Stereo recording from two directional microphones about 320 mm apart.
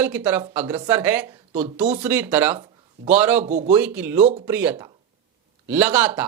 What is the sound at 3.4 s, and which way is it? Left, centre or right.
Speech, right.